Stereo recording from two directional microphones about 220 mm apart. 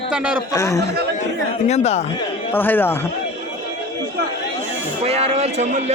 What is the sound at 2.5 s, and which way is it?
Speech, 10° left (ahead or behind).